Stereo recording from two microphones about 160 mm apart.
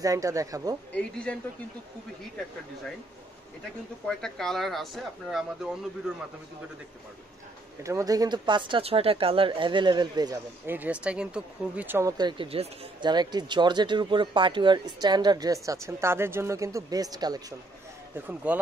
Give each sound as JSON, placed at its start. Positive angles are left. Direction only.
{"t": 0.0, "sound": "speech", "side_deg": -20}
{"t": 0.9, "sound": "speech", "side_deg": 5}
{"t": 4.0, "sound": "speech", "side_deg": 5}
{"t": 7.8, "sound": "speech", "side_deg": -20}
{"t": 10.7, "sound": "speech", "side_deg": -10}
{"t": 18.1, "sound": "speech", "side_deg": -10}